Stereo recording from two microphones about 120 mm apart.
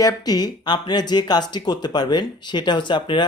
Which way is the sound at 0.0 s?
35° left (ahead or behind).